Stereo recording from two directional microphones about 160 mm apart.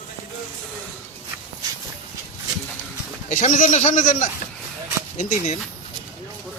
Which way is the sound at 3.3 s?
50° left (ahead or behind).